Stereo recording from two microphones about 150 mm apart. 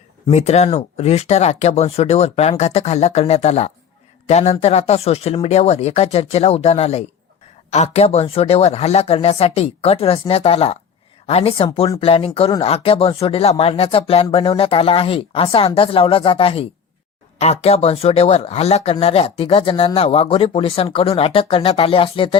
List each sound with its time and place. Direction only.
0.3 s speech: 45° left (ahead or behind)